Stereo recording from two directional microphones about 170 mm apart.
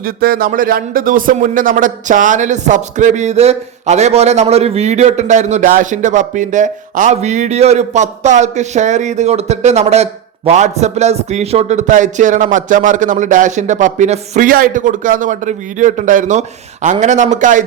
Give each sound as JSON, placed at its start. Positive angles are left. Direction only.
{"t": 0.0, "sound": "speech", "side_deg": -60}